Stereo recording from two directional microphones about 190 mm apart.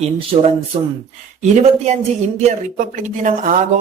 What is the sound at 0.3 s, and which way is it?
Speech, 30° right (ahead or behind).